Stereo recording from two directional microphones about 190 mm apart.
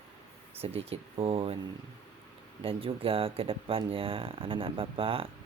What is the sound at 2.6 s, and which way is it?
Speech, 30° right (ahead or behind).